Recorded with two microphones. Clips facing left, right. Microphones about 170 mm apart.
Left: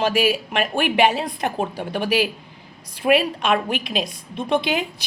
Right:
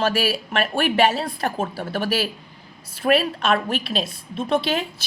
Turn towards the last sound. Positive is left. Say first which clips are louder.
# left 1 dB
turn(degrees=15)  # may be behind; listen again after turning